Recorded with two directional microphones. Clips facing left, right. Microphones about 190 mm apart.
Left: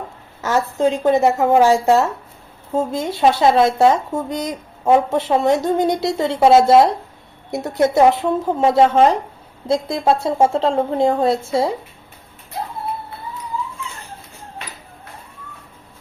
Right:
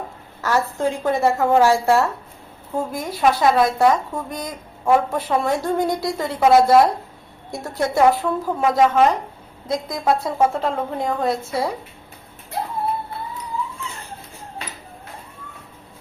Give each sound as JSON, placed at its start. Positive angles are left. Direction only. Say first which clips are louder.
{"t": 0.4, "sound": "speech", "louder": "left 3 dB", "side_deg": 20}